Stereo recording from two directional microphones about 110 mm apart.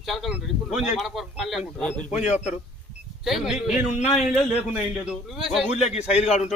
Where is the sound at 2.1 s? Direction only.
90° left.